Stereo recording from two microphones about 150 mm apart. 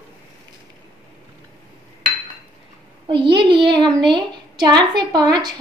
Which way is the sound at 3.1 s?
35° right (ahead or behind).